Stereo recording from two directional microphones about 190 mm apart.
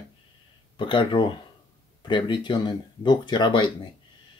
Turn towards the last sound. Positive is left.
turn(degrees=25)  # may be behind; listen again after turning